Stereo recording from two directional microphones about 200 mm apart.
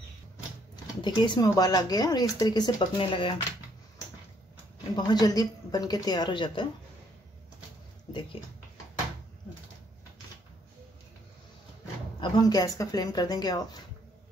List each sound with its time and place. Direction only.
1.0 s speech: 20° left (ahead or behind)
4.9 s speech: 20° left (ahead or behind)
12.2 s speech: 20° left (ahead or behind)